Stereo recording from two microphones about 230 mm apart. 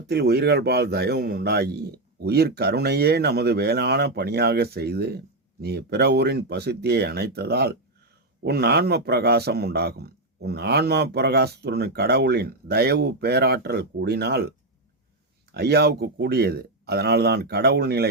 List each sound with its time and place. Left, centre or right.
0.1 s a man's voice: right
15.5 s a man's voice: right